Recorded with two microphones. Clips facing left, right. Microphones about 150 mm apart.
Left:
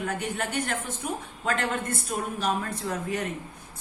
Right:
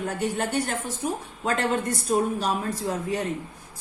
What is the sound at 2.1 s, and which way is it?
Speech, 30° right (ahead or behind).